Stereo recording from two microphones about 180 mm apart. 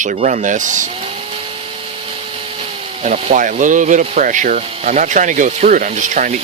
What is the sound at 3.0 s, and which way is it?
Speech, 40° right (ahead or behind).